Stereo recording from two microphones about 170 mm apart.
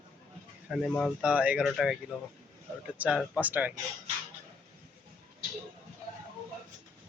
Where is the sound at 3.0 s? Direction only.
5° right (ahead or behind).